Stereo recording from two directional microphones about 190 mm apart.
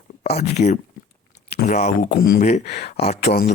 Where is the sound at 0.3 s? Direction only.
35° left (ahead or behind).